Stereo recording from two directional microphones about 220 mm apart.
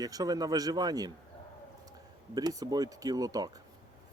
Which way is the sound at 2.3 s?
15° right (ahead or behind).